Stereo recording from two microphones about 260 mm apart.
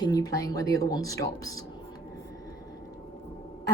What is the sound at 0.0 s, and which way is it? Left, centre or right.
Speech, centre.